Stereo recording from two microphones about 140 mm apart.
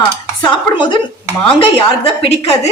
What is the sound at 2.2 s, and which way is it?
Speech, 45° left (ahead or behind).